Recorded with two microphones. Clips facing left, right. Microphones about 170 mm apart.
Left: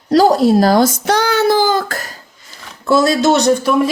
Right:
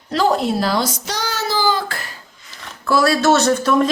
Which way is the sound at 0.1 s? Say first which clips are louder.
Left 7 dB; 40° left (ahead or behind).